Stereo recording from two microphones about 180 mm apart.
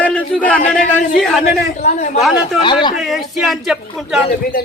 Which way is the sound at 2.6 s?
25° left (ahead or behind).